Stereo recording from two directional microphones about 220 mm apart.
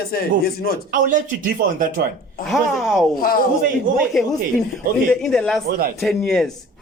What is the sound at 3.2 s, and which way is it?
Speech, 40° left (ahead or behind).